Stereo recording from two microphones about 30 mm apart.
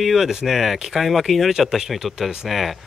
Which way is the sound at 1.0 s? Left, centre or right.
Centre.